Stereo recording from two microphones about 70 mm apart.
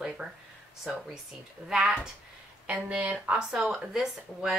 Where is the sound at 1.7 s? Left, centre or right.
Centre.